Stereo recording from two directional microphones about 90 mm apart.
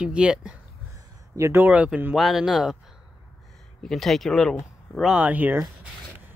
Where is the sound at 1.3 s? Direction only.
30° right (ahead or behind).